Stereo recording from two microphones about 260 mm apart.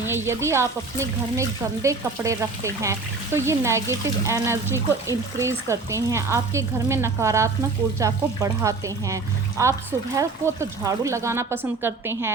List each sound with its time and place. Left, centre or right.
0.0 s speech: centre